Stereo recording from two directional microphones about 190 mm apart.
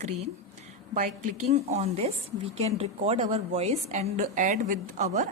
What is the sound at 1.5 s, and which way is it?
A woman's voice, 35° right (ahead or behind).